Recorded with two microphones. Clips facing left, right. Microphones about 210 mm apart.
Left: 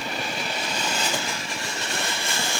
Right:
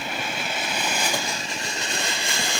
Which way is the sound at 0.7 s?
10° right (ahead or behind).